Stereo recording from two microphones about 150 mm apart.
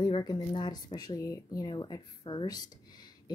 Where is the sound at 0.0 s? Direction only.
25° left (ahead or behind).